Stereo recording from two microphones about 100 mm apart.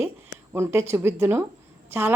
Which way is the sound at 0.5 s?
25° right (ahead or behind).